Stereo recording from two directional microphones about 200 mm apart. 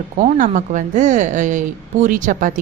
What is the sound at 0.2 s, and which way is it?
A woman's voice, 40° right (ahead or behind).